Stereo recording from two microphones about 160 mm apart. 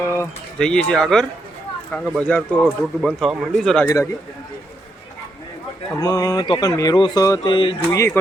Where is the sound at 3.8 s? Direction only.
15° left (ahead or behind).